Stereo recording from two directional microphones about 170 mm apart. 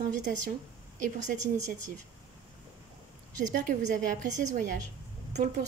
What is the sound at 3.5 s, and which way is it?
A woman's voice, 50° right (ahead or behind).